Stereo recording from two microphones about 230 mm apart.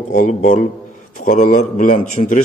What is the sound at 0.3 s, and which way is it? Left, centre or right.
A man's voice, left.